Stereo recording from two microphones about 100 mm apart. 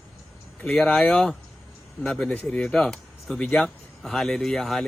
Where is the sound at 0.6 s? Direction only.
15° left (ahead or behind).